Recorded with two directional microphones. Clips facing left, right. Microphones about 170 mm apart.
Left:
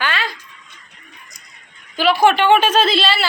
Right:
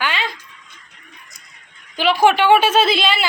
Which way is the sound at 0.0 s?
15° right (ahead or behind).